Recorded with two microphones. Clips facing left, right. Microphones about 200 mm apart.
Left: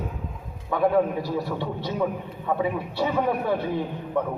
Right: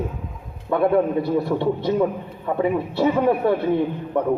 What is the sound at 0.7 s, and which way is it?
A man's voice, 60° right (ahead or behind).